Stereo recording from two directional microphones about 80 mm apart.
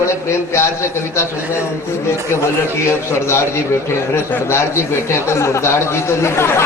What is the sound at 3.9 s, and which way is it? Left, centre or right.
Speech, left.